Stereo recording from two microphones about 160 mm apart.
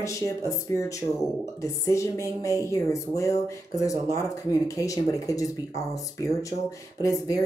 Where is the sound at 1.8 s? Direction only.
20° left (ahead or behind).